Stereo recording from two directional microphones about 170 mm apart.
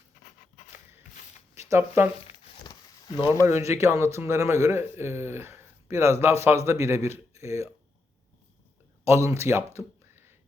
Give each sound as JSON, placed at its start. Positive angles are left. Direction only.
{"t": 1.5, "sound": "speech", "side_deg": -15}
{"t": 3.4, "sound": "speech", "side_deg": -15}
{"t": 9.0, "sound": "speech", "side_deg": -15}